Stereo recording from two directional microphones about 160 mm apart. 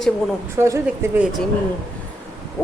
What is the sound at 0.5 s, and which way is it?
Speech, 15° right (ahead or behind).